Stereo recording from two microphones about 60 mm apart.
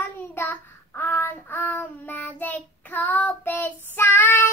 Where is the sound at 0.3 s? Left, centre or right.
Left.